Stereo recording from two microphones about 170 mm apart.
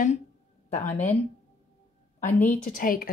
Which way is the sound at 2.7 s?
55° left (ahead or behind).